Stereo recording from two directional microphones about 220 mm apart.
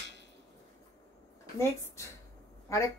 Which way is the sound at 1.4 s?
10° left (ahead or behind).